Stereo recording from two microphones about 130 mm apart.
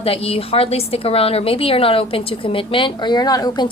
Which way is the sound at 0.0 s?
50° left (ahead or behind).